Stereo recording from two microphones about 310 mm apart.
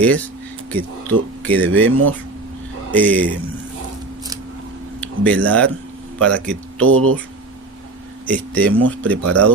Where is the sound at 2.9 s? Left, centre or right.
Centre.